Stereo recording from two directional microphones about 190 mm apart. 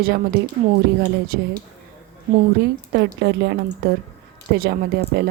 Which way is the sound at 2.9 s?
60° right (ahead or behind).